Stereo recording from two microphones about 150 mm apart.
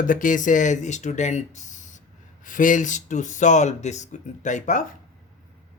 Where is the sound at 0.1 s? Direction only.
60° left (ahead or behind).